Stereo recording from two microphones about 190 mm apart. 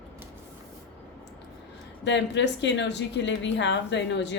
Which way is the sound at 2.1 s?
70° left (ahead or behind).